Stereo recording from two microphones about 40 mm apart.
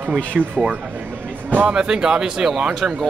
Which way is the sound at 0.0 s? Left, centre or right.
Right.